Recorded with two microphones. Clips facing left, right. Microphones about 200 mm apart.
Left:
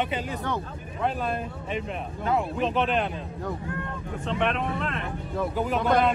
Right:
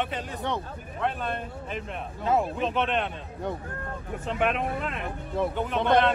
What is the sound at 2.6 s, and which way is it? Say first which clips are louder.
Speech: left 2 dB; centre (ahead or behind).